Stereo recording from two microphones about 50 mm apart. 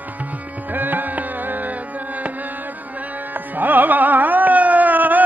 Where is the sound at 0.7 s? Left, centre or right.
Right.